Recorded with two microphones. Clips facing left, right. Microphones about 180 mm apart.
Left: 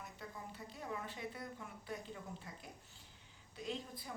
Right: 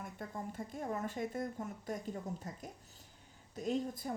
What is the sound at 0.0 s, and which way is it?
A woman's voice, 50° right (ahead or behind).